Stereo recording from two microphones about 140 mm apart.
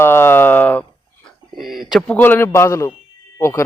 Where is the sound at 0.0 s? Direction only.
15° left (ahead or behind).